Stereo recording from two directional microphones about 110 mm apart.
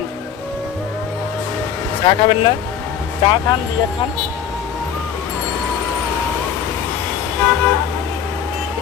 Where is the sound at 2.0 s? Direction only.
55° left (ahead or behind).